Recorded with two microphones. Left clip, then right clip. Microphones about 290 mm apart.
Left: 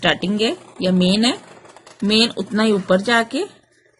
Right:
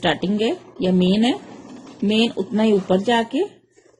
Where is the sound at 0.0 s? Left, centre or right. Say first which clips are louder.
Left 2 dB; left.